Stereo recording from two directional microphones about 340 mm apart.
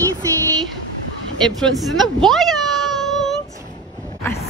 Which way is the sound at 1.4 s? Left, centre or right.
Centre.